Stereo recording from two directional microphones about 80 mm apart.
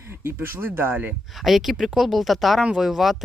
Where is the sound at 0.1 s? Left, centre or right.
Right.